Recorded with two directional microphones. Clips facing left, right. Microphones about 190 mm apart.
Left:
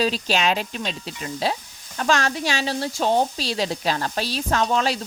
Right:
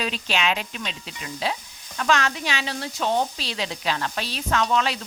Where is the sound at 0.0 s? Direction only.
35° left (ahead or behind).